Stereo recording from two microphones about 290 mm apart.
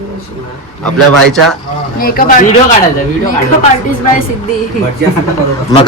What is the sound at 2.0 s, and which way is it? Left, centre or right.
Speech, left.